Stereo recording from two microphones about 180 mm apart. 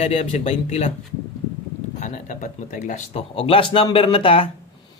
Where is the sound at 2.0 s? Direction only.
45° left (ahead or behind); by 4.4 s 30° left (ahead or behind).